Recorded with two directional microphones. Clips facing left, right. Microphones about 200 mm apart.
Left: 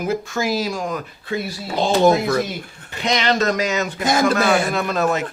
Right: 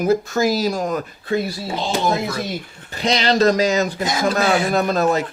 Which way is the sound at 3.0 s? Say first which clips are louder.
Right 3 dB; 35° right (ahead or behind).